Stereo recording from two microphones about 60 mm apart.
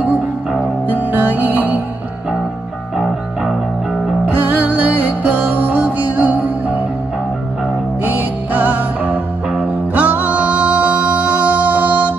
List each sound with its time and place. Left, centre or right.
0.8 s music: right
4.3 s music: right
8.0 s music: right